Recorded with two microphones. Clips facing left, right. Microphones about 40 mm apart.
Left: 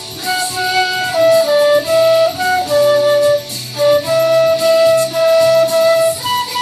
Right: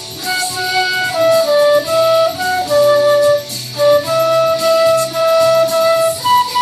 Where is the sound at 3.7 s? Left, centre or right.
Centre.